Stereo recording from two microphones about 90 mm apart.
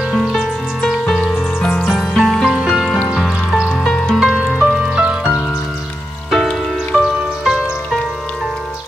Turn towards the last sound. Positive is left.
turn(degrees=-10)  # may be behind; listen again after turning